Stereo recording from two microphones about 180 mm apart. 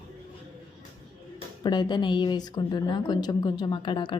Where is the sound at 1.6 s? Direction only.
25° left (ahead or behind).